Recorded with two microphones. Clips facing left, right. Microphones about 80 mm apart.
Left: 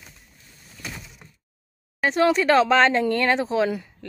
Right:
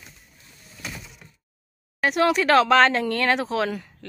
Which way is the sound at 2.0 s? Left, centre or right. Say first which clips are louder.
Left 1 dB; centre.